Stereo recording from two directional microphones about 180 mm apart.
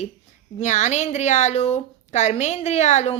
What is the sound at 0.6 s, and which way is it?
A woman's voice, 40° left (ahead or behind).